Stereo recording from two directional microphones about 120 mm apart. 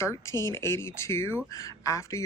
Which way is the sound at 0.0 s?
25° left (ahead or behind).